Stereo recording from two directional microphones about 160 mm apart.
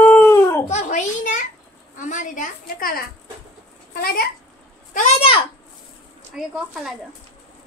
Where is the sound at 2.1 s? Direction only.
50° left (ahead or behind).